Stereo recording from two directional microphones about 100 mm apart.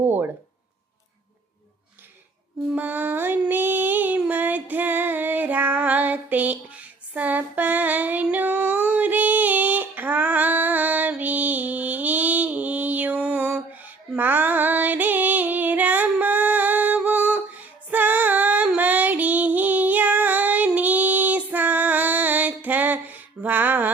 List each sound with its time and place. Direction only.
2.7 s music: 15° right (ahead or behind)